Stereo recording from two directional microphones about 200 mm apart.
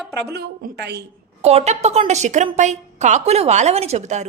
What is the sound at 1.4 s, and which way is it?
A woman's voice, 30° right (ahead or behind).